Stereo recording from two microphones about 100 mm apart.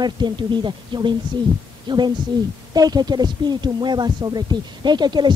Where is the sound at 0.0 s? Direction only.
50° right (ahead or behind).